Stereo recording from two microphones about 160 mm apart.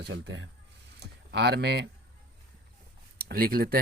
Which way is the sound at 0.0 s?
90° right.